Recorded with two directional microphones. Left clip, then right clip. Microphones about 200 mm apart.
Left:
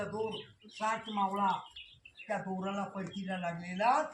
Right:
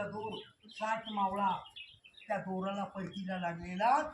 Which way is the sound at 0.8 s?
15° left (ahead or behind).